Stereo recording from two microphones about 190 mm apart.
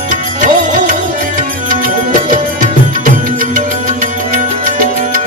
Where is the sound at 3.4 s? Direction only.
45° right (ahead or behind).